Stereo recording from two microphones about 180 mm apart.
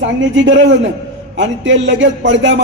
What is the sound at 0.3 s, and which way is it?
A man's voice, 90° right.